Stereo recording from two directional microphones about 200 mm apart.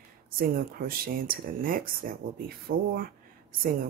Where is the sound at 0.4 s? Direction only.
45° right (ahead or behind).